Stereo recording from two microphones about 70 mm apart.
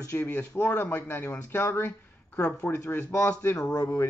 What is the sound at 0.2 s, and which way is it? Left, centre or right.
Speech, left.